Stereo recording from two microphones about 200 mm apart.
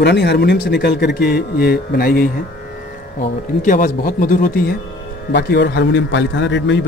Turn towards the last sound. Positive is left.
turn(degrees=65)  # may be behind; listen again after turning